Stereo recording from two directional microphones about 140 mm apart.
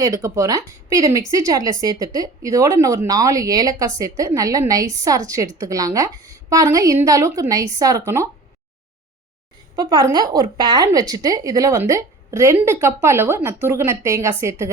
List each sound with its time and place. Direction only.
0.0 s speech: 20° right (ahead or behind)
9.7 s speech: 30° right (ahead or behind)